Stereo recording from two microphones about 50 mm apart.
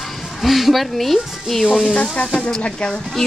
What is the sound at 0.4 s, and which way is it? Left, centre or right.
Speech, centre.